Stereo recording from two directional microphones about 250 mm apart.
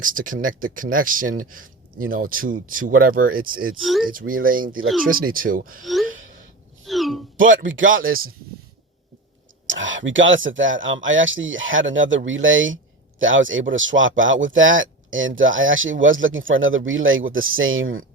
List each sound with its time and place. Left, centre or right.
0.0 s speech: right
3.8 s speech: centre
4.1 s speech: right
5.8 s speech: centre
6.8 s wail: centre
7.6 s a man's voice: right
9.6 s speech: right